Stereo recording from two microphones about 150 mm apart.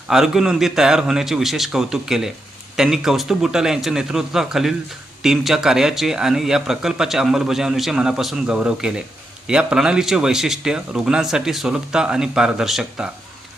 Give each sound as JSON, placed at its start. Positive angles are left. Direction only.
{"t": 0.1, "sound": "a man's voice", "side_deg": 0}